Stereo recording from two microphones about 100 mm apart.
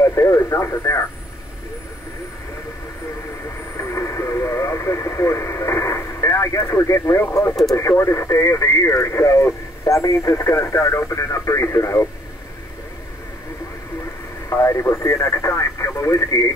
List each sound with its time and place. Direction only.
0.0 s speech: 25° left (ahead or behind)
3.7 s speech: 30° left (ahead or behind)
14.5 s speech: 25° left (ahead or behind)